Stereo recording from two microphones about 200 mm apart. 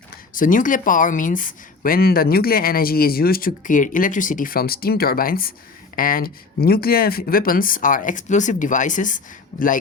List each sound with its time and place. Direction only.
0.1 s speech: 40° left (ahead or behind)